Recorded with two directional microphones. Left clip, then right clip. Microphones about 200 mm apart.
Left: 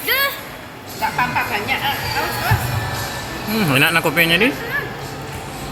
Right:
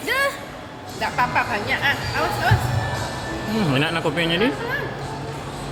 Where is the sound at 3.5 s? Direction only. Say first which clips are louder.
Left 7 dB; centre (ahead or behind).